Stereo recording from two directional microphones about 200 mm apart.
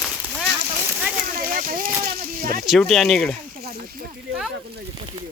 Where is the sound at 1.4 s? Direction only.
45° right (ahead or behind).